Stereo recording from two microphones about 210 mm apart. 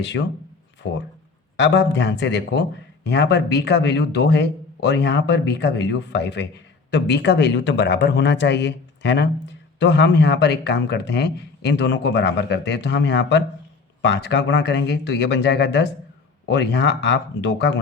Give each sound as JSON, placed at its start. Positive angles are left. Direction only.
{"t": 0.2, "sound": "speech", "side_deg": 55}